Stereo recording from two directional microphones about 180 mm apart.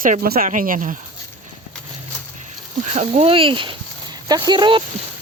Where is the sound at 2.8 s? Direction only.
40° right (ahead or behind).